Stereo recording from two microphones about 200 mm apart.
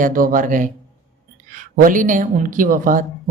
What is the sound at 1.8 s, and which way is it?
Speech, 40° right (ahead or behind).